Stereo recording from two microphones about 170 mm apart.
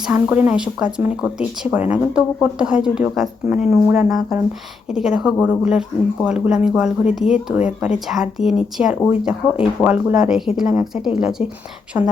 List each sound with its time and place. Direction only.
0.1 s speech: 10° right (ahead or behind)
11.9 s a woman's voice: 15° right (ahead or behind)